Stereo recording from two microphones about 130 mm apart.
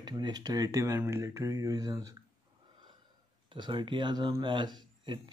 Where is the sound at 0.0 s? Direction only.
30° right (ahead or behind).